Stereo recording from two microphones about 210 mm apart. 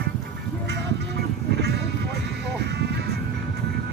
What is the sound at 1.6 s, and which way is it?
Sheep, 55° right (ahead or behind).